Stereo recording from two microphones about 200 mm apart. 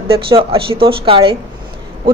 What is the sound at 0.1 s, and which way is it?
A woman's voice, 25° right (ahead or behind).